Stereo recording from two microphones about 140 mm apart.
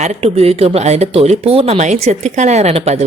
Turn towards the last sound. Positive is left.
turn(degrees=-50)  # may be behind; listen again after turning